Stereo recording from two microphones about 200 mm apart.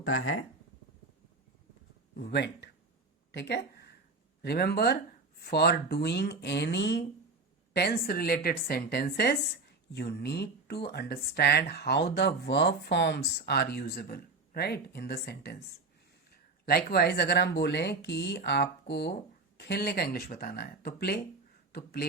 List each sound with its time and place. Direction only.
0.0 s speech: 85° left
2.1 s speech: 55° left (ahead or behind)
16.6 s speech: 50° left (ahead or behind)